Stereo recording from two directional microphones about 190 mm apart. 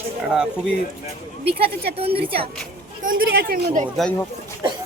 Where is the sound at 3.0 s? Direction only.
50° right (ahead or behind).